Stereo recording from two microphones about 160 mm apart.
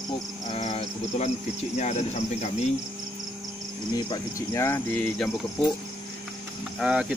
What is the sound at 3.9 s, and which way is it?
Cricket, 25° left (ahead or behind).